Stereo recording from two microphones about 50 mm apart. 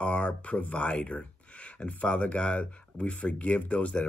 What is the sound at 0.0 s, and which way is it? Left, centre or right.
Speech, left.